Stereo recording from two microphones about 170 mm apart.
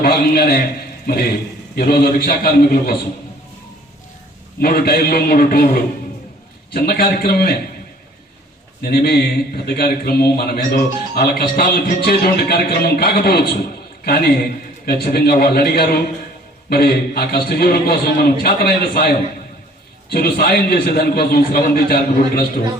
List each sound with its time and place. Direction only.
0.0 s a man's voice: 60° left (ahead or behind)
4.6 s a man's voice: 65° left (ahead or behind)
8.8 s a man's voice: 65° left (ahead or behind)